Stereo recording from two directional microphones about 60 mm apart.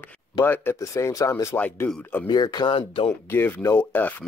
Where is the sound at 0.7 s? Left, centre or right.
Left.